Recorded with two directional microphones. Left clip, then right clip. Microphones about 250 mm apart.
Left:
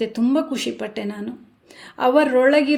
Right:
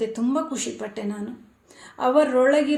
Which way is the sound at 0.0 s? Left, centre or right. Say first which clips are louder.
Left 4 dB; left.